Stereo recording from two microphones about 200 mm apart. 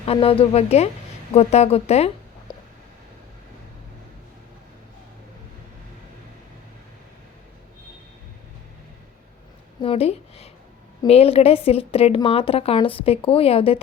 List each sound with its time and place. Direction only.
0.0 s a woman's voice: 30° left (ahead or behind)
2.5 s a sound: 20° left (ahead or behind)
9.8 s a woman's voice: 30° left (ahead or behind)